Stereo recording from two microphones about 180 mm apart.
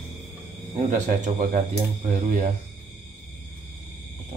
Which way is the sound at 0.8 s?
40° right (ahead or behind).